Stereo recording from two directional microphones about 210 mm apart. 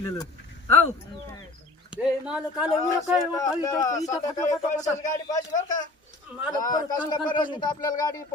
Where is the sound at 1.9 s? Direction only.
5° right (ahead or behind).